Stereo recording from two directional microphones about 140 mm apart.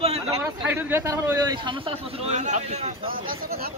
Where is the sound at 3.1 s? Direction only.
90° right.